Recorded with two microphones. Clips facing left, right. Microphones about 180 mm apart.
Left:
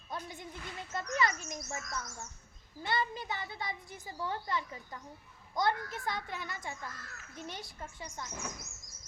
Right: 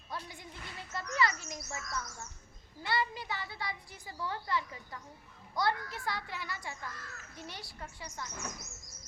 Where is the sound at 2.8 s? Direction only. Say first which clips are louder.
Even; 20° left (ahead or behind).